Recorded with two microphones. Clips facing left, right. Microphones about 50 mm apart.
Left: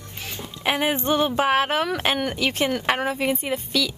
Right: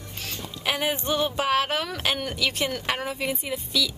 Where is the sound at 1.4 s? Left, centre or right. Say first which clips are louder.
Left 4 dB; centre.